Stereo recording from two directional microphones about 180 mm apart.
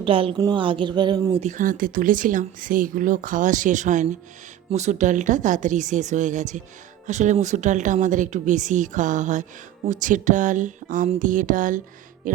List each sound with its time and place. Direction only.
0.0 s a woman's voice: 30° right (ahead or behind)
1.4 s speech: 45° right (ahead or behind)
12.2 s music: 45° right (ahead or behind)